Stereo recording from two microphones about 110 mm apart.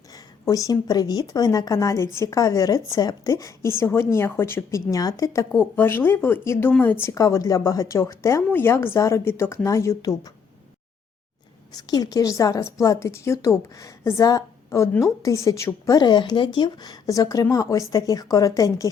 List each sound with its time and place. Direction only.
0.1 s speech: 30° left (ahead or behind)
4.9 s a woman's voice: 35° left (ahead or behind)
5.5 s speech: 20° left (ahead or behind)
7.2 s a woman's voice: 30° left (ahead or behind)
11.7 s a woman's voice: 35° left (ahead or behind)